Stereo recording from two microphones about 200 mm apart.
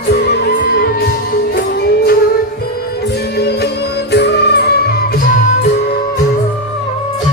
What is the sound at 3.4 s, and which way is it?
Music, 55° left (ahead or behind).